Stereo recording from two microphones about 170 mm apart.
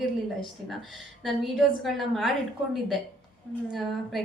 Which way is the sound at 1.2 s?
Centre (ahead or behind).